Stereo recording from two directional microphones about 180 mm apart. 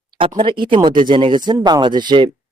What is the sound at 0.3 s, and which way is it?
Speech, 25° right (ahead or behind).